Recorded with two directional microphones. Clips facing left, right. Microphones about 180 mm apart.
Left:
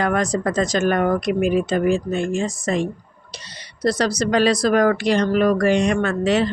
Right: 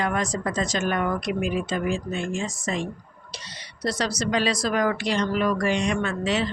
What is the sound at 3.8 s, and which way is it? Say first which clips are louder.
Speech: left 7 dB; 35° left (ahead or behind).